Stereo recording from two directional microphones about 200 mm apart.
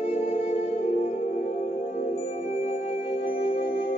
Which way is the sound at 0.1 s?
35° left (ahead or behind).